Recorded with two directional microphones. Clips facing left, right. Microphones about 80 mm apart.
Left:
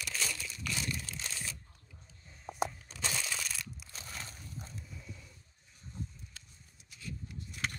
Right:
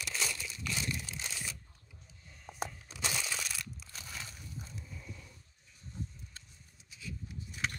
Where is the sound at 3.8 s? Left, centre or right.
Left.